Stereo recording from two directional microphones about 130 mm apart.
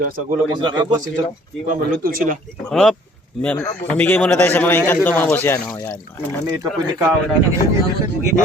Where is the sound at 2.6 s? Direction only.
5° left (ahead or behind).